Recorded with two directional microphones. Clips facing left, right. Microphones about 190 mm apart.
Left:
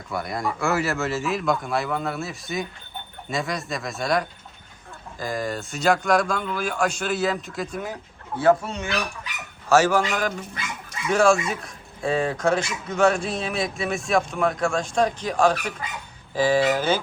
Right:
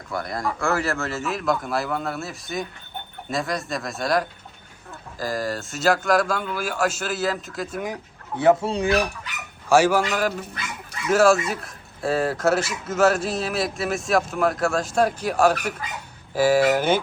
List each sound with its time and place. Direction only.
0.1 s speech: centre (ahead or behind)
8.4 s speech: 20° right (ahead or behind)